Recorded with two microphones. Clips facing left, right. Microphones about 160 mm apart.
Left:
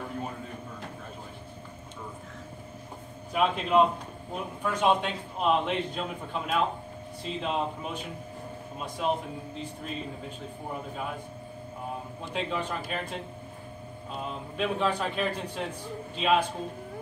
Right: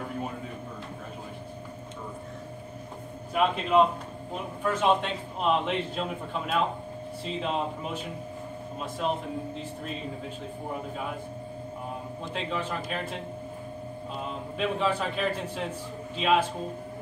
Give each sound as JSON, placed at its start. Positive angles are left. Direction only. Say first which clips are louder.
{"t": 3.3, "sound": "a man's voice", "louder": "right 1 dB", "side_deg": 0}
{"t": 12.3, "sound": "a man's voice", "louder": "left 1 dB", "side_deg": 0}
{"t": 14.2, "sound": "a man's voice", "louder": "even", "side_deg": 0}